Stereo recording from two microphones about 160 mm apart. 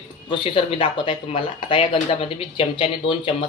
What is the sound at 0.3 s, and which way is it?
Speech, 35° left (ahead or behind).